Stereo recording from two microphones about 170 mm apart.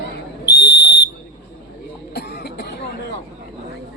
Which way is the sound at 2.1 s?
70° left (ahead or behind).